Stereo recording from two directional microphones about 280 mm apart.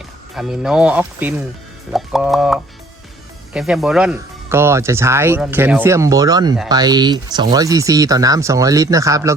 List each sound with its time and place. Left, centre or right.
0.3 s speech: centre